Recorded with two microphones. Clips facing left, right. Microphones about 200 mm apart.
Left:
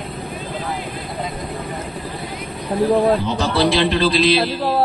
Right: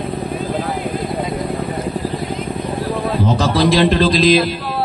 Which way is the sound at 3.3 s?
40° right (ahead or behind).